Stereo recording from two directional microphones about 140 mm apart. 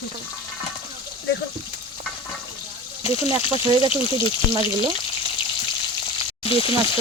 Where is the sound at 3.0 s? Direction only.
40° left (ahead or behind).